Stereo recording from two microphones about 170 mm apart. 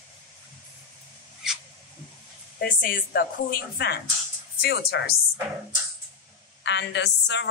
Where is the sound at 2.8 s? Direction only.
65° left (ahead or behind).